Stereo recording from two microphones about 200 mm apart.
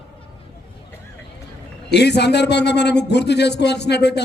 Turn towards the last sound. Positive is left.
turn(degrees=55)  # may be behind; listen again after turning